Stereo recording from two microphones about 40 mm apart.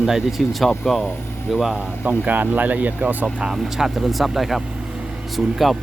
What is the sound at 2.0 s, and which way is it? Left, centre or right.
Speech, right.